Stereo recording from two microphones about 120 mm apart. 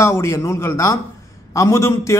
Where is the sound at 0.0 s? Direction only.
25° left (ahead or behind).